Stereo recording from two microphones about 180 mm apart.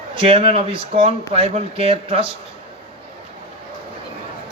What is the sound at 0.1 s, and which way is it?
A man's voice, 30° right (ahead or behind).